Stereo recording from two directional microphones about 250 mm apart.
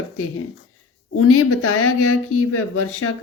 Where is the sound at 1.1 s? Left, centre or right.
Left.